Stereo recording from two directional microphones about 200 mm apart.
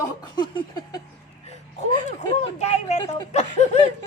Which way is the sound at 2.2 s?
20° left (ahead or behind).